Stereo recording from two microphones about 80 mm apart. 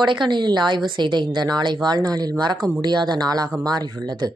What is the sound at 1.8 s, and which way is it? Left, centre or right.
Speech, right.